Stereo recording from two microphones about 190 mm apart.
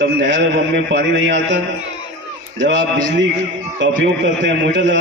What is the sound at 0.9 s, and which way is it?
Speech, 65° right (ahead or behind).